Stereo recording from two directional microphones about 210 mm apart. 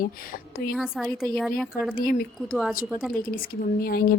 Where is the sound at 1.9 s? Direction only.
45° left (ahead or behind).